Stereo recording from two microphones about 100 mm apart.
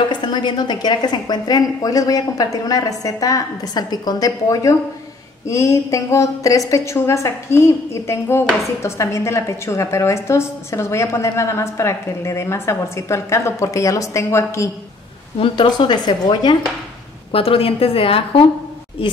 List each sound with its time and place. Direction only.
0.1 s a woman's voice: 50° left (ahead or behind); by 14.7 s 30° left (ahead or behind)
15.3 s a woman's voice: 60° left (ahead or behind)
17.3 s a woman's voice: 70° left (ahead or behind)